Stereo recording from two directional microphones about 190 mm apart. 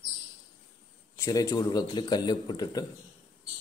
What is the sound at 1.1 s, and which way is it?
A man's voice, 15° left (ahead or behind).